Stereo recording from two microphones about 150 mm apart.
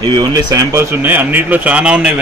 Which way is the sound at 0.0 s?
25° right (ahead or behind).